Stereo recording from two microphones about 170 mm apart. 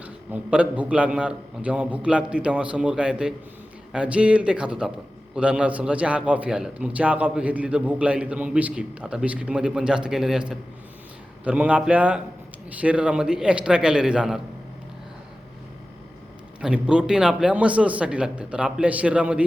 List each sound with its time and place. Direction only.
0.0 s a man's voice: 10° right (ahead or behind)
16.6 s a man's voice: 5° right (ahead or behind)